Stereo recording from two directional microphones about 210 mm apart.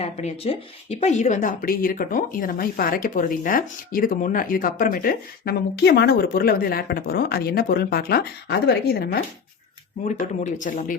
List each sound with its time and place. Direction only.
0.0 s a woman's voice: 30° left (ahead or behind); by 9.2 s 50° left (ahead or behind)
10.0 s speech: 35° left (ahead or behind)